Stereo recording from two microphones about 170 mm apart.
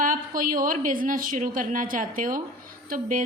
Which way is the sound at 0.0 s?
50° right (ahead or behind).